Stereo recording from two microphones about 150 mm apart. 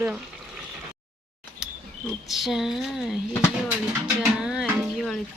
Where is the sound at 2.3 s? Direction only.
Centre (ahead or behind).